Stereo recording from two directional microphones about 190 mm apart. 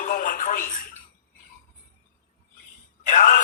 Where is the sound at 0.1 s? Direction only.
45° left (ahead or behind).